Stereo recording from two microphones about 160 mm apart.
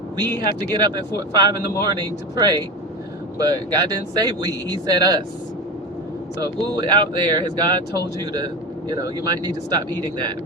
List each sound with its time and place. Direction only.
0.3 s speech: 25° right (ahead or behind)
6.4 s speech: 30° right (ahead or behind)